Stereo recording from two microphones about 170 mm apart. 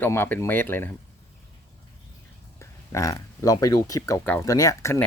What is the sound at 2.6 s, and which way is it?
Speech, 15° left (ahead or behind).